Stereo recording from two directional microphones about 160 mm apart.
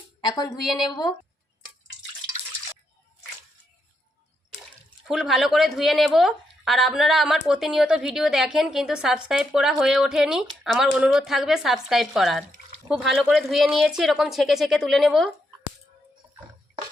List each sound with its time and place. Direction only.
0.3 s speech: 25° left (ahead or behind)
5.0 s speech: centre (ahead or behind)